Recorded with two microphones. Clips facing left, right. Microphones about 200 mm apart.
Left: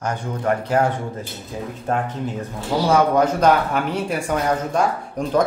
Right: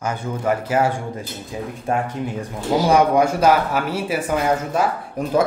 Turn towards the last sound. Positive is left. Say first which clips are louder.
# even
turn(degrees=-5)  # may be behind; listen again after turning